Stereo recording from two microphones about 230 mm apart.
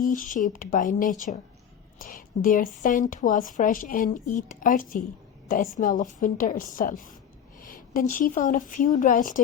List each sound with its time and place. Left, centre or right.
0.0 s a woman's voice: left